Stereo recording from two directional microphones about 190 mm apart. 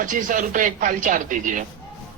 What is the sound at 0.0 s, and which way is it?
Speech, 45° right (ahead or behind).